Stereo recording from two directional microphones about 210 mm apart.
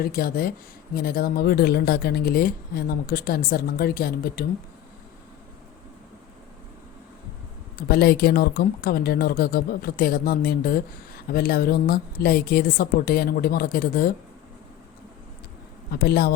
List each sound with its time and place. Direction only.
0.0 s speech: 45° left (ahead or behind)
7.8 s speech: 50° left (ahead or behind)
15.9 s speech: 50° left (ahead or behind)